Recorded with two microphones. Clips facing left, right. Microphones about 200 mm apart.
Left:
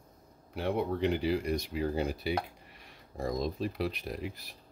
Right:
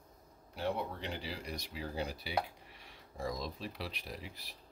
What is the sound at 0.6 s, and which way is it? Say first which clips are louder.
Speech: left 7 dB; 60° left (ahead or behind).